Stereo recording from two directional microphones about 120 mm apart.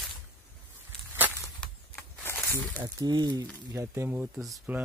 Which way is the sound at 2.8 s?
35° right (ahead or behind).